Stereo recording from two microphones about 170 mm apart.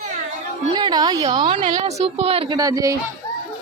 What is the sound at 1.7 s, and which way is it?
Speech, 35° right (ahead or behind).